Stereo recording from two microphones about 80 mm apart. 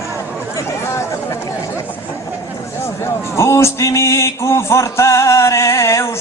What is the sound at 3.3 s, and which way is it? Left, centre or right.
Music, left.